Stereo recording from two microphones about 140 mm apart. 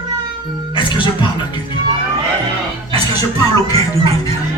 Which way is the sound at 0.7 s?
35° left (ahead or behind).